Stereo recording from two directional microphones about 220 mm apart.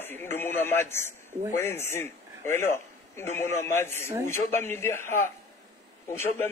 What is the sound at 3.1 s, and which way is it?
A man's voice, 10° left (ahead or behind).